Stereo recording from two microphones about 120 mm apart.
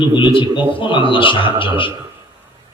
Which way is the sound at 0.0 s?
45° left (ahead or behind).